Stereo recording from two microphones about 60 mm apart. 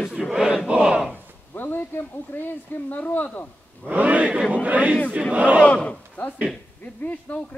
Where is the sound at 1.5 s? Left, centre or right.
Left.